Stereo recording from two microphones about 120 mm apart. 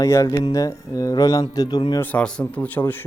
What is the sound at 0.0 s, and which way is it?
Speech, 25° left (ahead or behind).